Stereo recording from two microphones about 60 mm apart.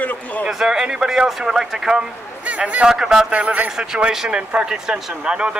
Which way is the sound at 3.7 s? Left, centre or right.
Centre.